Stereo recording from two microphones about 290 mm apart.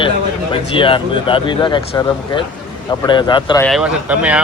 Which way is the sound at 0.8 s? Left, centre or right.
Centre.